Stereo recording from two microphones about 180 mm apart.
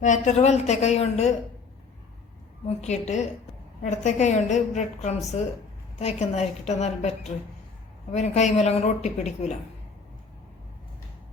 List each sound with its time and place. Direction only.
0.0 s a woman's voice: 40° left (ahead or behind)
2.6 s a woman's voice: 40° left (ahead or behind)
8.1 s a woman's voice: 40° left (ahead or behind)